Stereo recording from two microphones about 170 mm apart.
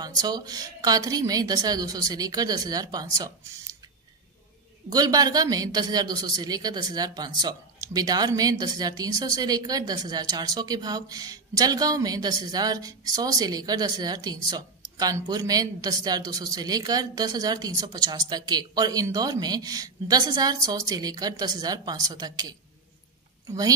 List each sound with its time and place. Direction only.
0.0 s speech: 20° right (ahead or behind)
4.8 s speech: 20° right (ahead or behind)